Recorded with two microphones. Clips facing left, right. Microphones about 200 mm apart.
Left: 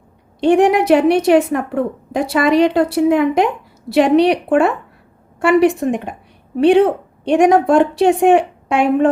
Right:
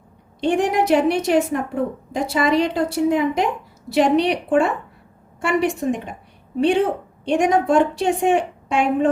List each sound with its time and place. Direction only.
0.3 s a woman's voice: 60° left (ahead or behind)